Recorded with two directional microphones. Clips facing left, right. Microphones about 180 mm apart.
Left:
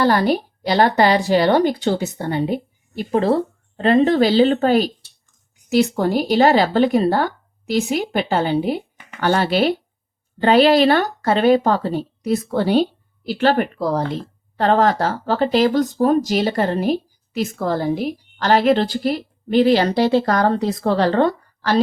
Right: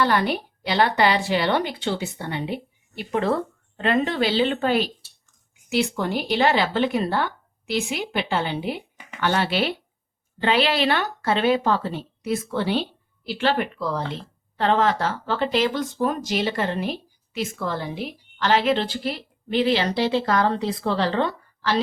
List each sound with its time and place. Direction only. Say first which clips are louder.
0.0 s speech: left 5 dB; 40° left (ahead or behind)